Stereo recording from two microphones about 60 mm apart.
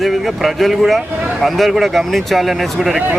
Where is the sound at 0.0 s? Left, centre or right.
Centre.